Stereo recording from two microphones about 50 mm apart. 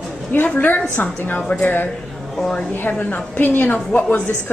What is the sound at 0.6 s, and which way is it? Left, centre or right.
A woman's voice, left.